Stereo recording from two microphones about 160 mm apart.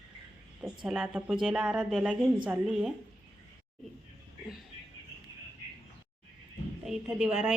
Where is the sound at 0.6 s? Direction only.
5° right (ahead or behind).